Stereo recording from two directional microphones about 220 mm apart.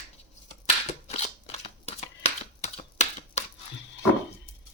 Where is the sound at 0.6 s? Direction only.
30° left (ahead or behind).